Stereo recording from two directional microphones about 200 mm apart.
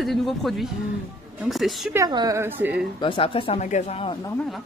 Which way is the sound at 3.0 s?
25° left (ahead or behind).